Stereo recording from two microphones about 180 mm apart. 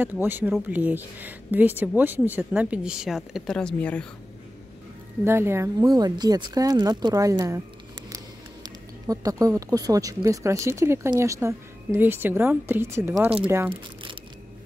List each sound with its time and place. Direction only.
0.0 s speech: 10° right (ahead or behind); by 4.1 s 5° left (ahead or behind)
5.2 s speech: 15° right (ahead or behind)
9.0 s speech: 20° right (ahead or behind)